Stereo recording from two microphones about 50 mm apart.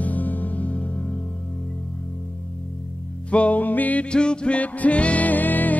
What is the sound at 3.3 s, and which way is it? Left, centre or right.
Music, left.